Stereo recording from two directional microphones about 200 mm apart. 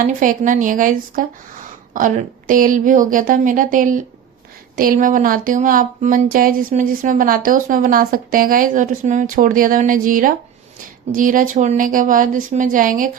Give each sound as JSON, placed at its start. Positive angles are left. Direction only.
{"t": 0.2, "sound": "speech", "side_deg": -40}